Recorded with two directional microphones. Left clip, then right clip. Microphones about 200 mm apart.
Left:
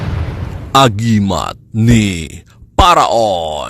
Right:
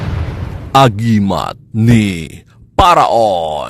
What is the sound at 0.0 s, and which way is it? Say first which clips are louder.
Speech: even; centre (ahead or behind).